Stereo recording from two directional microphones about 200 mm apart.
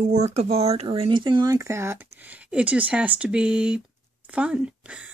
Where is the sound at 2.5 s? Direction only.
5° right (ahead or behind).